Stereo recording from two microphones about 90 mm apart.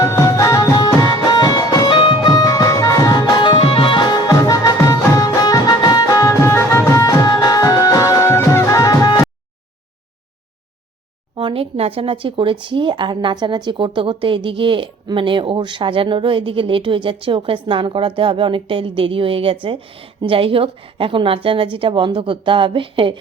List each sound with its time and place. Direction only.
0.0 s music: 35° left (ahead or behind)
1.0 s music: 50° left (ahead or behind)
2.0 s music: 70° left (ahead or behind)
2.3 s music: 45° left (ahead or behind)
4.3 s music: 40° left (ahead or behind)
11.3 s speech: 80° right